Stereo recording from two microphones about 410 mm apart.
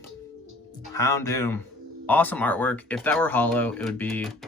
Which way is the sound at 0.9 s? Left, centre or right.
Centre.